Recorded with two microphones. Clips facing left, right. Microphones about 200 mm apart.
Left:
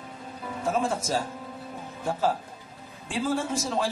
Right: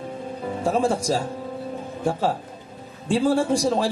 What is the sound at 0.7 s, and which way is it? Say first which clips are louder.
Speech: right 5 dB; 30° right (ahead or behind).